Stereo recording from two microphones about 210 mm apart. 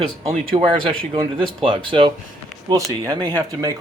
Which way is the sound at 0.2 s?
30° right (ahead or behind).